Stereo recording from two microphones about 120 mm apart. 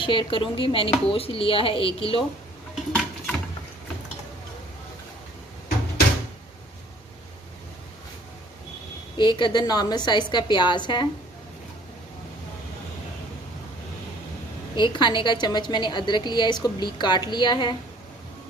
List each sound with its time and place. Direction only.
0.0 s speech: 45° left (ahead or behind)
2.9 s a sound: 5° left (ahead or behind)
9.1 s a woman's voice: 40° left (ahead or behind)
14.8 s a woman's voice: 40° left (ahead or behind)